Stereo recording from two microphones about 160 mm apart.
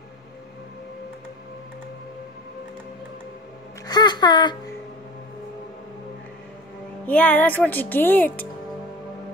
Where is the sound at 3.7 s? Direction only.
25° left (ahead or behind).